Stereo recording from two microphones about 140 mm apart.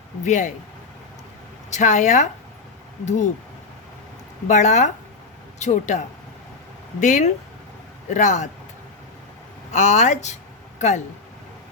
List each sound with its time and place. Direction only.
0.3 s speech: 55° left (ahead or behind)
1.7 s speech: 55° left (ahead or behind)
4.4 s speech: 55° left (ahead or behind)
7.0 s speech: 60° left (ahead or behind)
9.7 s speech: 55° left (ahead or behind)